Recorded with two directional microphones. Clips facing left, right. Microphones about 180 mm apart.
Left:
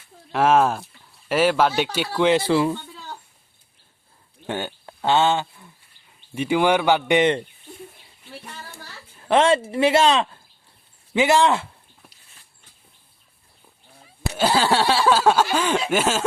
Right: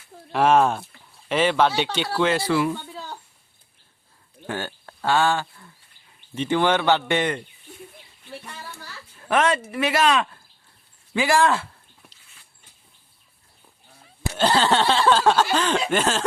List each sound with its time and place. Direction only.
0.3 s speech: centre (ahead or behind)
2.5 s speech: 30° left (ahead or behind)
4.4 s speech: 20° left (ahead or behind)
9.3 s speech: 30° left (ahead or behind)
14.2 s speech: 10° left (ahead or behind)